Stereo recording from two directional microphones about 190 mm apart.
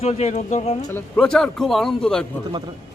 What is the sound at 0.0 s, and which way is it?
Speech, 35° left (ahead or behind).